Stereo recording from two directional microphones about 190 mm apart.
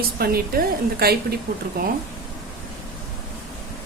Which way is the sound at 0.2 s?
55° right (ahead or behind).